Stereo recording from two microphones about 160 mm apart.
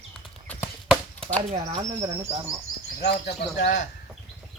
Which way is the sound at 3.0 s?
90° left.